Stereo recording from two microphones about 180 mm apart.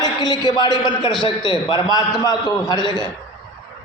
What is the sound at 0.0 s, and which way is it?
A man's voice, 20° left (ahead or behind).